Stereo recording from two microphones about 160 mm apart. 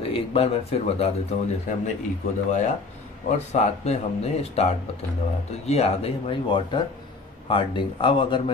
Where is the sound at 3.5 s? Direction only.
45° left (ahead or behind).